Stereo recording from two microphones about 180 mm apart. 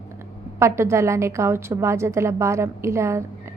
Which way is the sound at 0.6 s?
15° right (ahead or behind).